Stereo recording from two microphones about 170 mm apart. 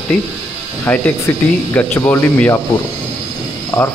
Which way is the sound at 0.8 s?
10° left (ahead or behind).